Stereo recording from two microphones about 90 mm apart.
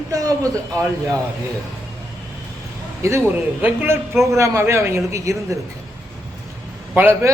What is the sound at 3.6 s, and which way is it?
Speech, 20° right (ahead or behind).